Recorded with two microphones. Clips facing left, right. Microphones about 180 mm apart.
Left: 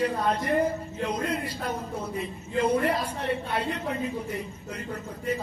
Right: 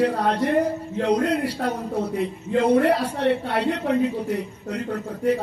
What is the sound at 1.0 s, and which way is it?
A man's voice, 75° right (ahead or behind).